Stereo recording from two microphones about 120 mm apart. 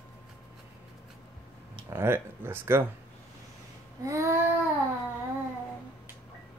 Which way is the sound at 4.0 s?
25° right (ahead or behind).